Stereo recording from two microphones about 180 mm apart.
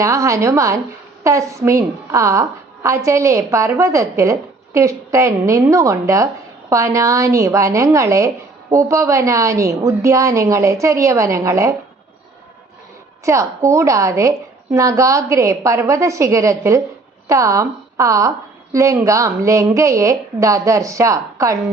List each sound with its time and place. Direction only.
0.0 s a woman's voice: 15° right (ahead or behind)
13.2 s a woman's voice: 15° right (ahead or behind)